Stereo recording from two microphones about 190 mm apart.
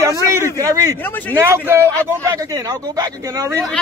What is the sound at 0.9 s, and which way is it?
Speech, 10° left (ahead or behind).